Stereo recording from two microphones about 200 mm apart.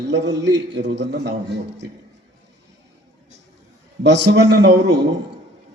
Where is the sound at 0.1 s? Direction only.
60° right (ahead or behind).